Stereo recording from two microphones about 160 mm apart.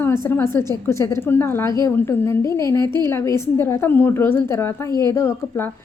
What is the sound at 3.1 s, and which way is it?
A woman's voice, 15° left (ahead or behind).